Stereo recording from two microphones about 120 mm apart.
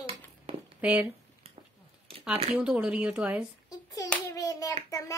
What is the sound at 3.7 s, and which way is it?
Hands, 30° left (ahead or behind).